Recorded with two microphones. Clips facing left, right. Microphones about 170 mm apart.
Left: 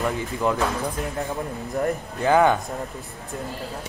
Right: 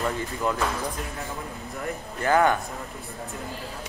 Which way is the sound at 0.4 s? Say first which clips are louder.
Left 4 dB; 20° left (ahead or behind).